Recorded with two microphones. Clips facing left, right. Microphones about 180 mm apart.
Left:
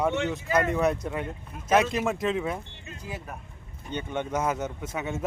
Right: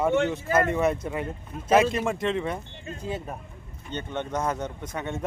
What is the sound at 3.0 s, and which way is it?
Speech, 25° right (ahead or behind).